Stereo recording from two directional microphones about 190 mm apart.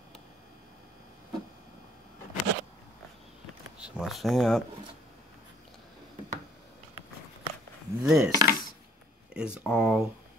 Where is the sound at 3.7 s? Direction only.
5° right (ahead or behind).